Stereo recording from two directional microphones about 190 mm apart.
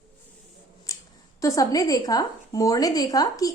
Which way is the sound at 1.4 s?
15° left (ahead or behind).